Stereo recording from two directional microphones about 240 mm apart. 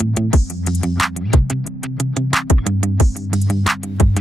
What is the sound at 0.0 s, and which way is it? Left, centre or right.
Music, centre.